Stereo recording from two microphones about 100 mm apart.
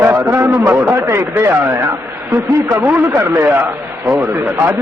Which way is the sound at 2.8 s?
20° right (ahead or behind).